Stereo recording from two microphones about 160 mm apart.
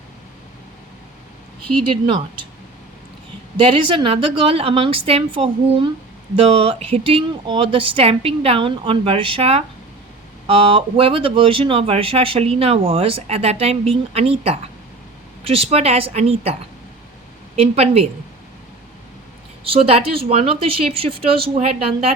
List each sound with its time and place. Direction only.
2.0 s speech: 30° right (ahead or behind)
3.6 s speech: 30° right (ahead or behind)
17.6 s speech: 40° right (ahead or behind)
19.6 s speech: 35° right (ahead or behind)